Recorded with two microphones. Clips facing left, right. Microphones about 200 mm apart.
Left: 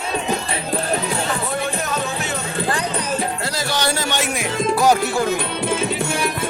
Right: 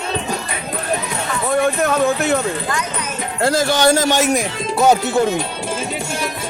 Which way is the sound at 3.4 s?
50° right (ahead or behind).